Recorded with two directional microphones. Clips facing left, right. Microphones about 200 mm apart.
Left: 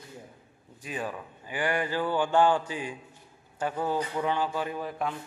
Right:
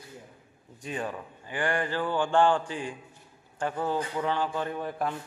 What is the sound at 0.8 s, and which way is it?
A man's voice, 5° left (ahead or behind).